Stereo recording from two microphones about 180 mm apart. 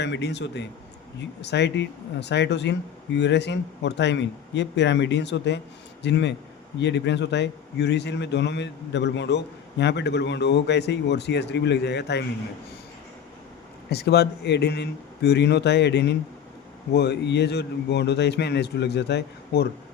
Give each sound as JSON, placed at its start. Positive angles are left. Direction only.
{"t": 0.0, "sound": "a man's voice", "side_deg": 75}
{"t": 13.9, "sound": "a man's voice", "side_deg": 65}